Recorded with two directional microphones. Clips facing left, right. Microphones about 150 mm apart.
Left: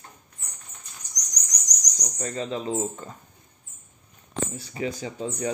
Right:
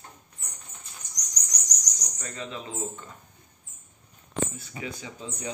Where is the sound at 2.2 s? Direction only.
35° left (ahead or behind).